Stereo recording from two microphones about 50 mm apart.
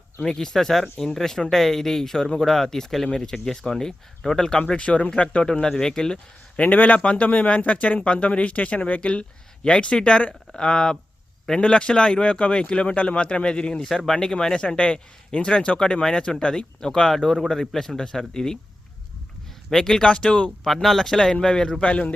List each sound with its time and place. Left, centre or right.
0.2 s a man's voice: centre
4.8 s speech: left
6.6 s a man's voice: left; by 17.2 s centre
17.2 s speech: centre
17.7 s a man's voice: centre
19.7 s a man's voice: centre
20.1 s speech: left
20.8 s a man's voice: centre; by 22.1 s left